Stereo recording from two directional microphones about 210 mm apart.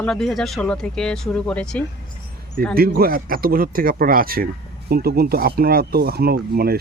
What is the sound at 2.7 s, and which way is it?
Speech, 45° right (ahead or behind).